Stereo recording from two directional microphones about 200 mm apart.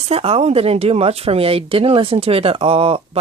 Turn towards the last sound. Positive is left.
turn(degrees=-30)  # may be behind; listen again after turning